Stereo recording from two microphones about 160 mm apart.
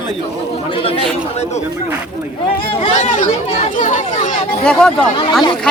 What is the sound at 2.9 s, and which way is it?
Speech, 45° left (ahead or behind).